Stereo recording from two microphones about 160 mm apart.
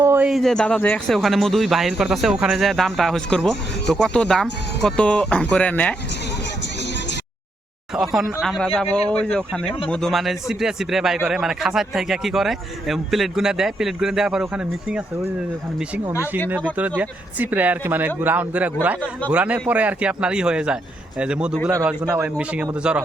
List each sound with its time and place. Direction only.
0.0 s a sound: 15° right (ahead or behind)
0.3 s speech: centre (ahead or behind)
7.9 s speech: centre (ahead or behind)
16.7 s speech: 10° right (ahead or behind)